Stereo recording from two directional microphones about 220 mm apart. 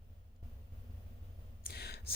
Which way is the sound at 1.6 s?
45° left (ahead or behind).